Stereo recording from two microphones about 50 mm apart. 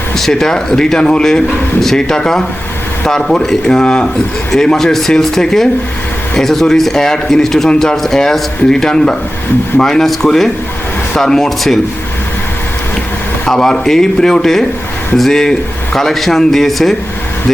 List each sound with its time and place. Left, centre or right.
0.2 s a man's voice: centre
13.5 s a man's voice: centre